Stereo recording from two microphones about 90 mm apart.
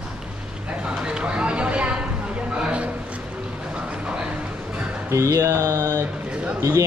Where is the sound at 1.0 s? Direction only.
10° right (ahead or behind).